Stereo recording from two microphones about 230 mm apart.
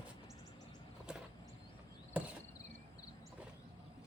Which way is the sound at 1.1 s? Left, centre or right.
Centre.